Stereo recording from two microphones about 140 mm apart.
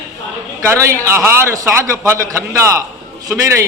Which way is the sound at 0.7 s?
20° right (ahead or behind).